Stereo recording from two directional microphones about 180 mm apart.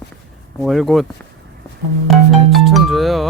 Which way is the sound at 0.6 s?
Centre (ahead or behind).